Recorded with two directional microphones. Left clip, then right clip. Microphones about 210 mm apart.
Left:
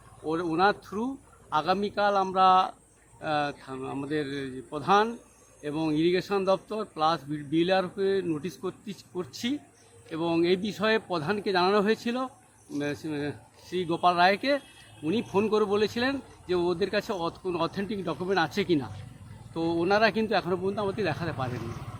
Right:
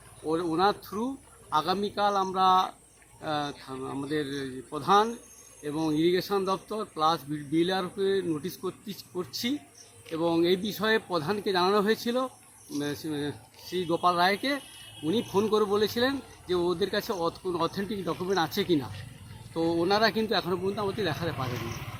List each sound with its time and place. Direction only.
0.3 s a man's voice: 5° left (ahead or behind)
10.1 s speech: 5° left (ahead or behind)
10.5 s speech: 30° left (ahead or behind)
10.8 s a man's voice: 10° left (ahead or behind)
18.5 s speech: 30° left (ahead or behind)
19.5 s a man's voice: 5° left (ahead or behind)